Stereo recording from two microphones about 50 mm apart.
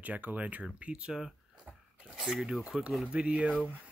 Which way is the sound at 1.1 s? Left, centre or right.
Centre.